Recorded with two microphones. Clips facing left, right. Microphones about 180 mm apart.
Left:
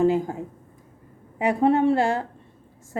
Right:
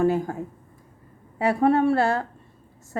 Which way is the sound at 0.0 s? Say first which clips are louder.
Left 1 dB; 15° left (ahead or behind).